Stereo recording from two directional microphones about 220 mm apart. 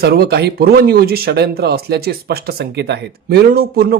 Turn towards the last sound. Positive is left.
turn(degrees=-45)  # may be behind; listen again after turning